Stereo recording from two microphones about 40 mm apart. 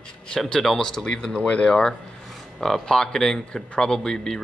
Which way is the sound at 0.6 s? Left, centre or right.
Centre.